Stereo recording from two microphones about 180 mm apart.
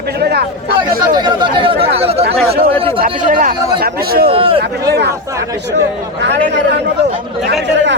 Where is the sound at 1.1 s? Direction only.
25° right (ahead or behind).